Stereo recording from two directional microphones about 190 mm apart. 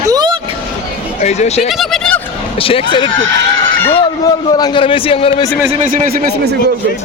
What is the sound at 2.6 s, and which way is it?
Speech, 30° left (ahead or behind).